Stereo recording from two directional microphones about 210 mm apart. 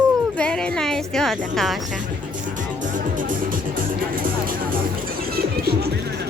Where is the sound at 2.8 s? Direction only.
40° right (ahead or behind).